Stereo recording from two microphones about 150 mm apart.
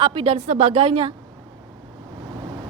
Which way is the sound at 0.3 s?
55° right (ahead or behind).